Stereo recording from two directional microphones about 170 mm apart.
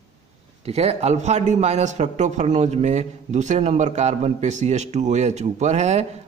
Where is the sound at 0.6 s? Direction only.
40° right (ahead or behind).